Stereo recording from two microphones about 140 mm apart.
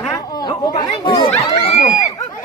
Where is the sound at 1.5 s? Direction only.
50° left (ahead or behind).